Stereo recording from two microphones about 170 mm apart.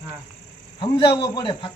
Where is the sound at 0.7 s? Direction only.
30° left (ahead or behind).